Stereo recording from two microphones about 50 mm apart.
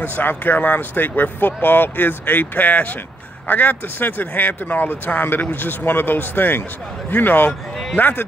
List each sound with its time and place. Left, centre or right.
0.0 s speech: left